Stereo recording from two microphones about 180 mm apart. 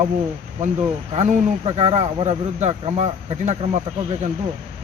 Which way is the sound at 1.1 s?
35° right (ahead or behind).